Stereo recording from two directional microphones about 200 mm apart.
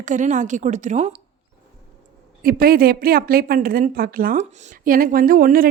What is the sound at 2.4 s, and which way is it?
A woman's voice, 50° right (ahead or behind).